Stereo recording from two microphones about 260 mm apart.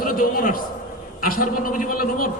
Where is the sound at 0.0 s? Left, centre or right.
Left.